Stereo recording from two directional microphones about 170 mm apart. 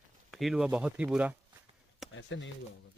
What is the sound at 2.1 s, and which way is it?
Speech, 90° left.